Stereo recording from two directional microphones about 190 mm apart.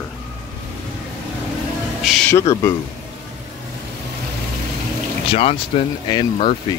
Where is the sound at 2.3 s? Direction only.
15° left (ahead or behind).